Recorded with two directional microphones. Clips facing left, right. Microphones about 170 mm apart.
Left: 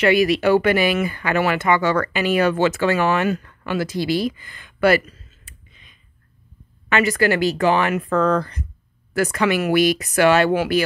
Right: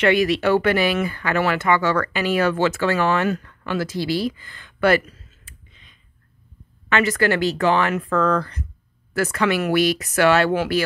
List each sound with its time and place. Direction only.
0.0 s speech: 10° left (ahead or behind)
5.4 s a sound: 10° left (ahead or behind)
6.9 s speech: 10° left (ahead or behind)